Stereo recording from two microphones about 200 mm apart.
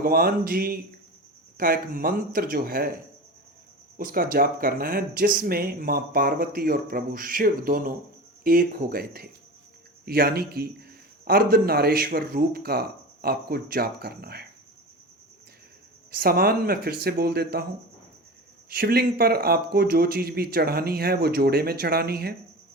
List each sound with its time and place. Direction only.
0.0 s speech: 50° right (ahead or behind)
16.1 s speech: 50° right (ahead or behind)
18.7 s speech: 50° right (ahead or behind)